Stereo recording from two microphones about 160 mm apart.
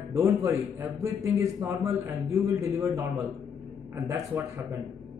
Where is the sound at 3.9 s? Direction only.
15° right (ahead or behind).